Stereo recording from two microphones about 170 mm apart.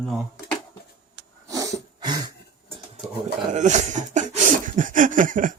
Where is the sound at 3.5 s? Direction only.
45° right (ahead or behind).